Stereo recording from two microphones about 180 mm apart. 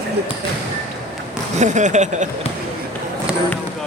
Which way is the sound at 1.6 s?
40° right (ahead or behind).